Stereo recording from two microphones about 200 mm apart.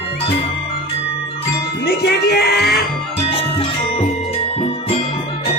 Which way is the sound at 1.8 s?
55° left (ahead or behind).